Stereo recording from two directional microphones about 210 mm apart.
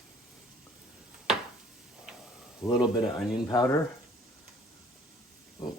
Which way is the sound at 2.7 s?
Centre (ahead or behind).